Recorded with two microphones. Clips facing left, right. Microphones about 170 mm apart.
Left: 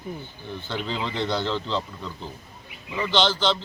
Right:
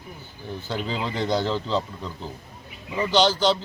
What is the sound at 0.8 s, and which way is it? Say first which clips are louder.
A man's voice: right 1 dB; 5° right (ahead or behind).